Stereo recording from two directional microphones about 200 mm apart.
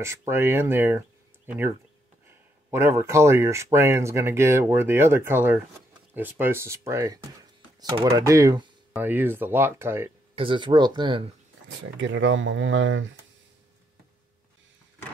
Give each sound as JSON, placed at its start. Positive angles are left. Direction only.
{"t": 0.3, "sound": "speech", "side_deg": -10}
{"t": 10.3, "sound": "speech", "side_deg": -25}
{"t": 12.0, "sound": "speech", "side_deg": -70}